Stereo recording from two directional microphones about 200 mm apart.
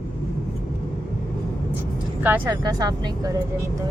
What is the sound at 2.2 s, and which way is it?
Speech, 10° right (ahead or behind).